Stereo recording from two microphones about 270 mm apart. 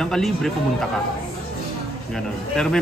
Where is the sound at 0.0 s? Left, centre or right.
Centre.